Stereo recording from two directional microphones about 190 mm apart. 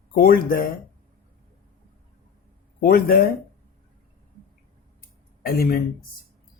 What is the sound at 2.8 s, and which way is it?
Speech, 50° left (ahead or behind).